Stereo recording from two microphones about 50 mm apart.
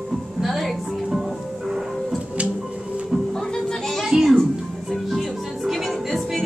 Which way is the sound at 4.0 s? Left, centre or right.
Centre.